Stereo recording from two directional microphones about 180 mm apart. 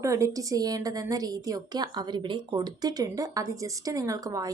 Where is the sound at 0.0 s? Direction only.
15° right (ahead or behind).